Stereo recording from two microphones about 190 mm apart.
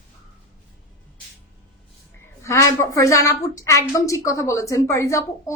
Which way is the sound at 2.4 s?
15° left (ahead or behind).